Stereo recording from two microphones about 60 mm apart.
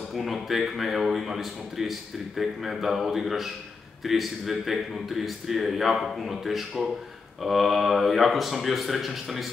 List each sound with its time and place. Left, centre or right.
0.1 s a man's voice: centre